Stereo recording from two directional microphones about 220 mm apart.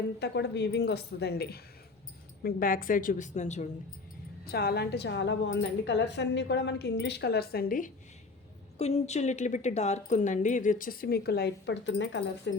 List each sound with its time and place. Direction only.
0.2 s a woman's voice: 50° left (ahead or behind); by 3.7 s 30° left (ahead or behind)
4.4 s a woman's voice: 45° left (ahead or behind)